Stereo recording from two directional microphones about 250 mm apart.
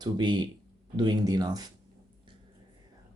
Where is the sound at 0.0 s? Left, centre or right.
Centre.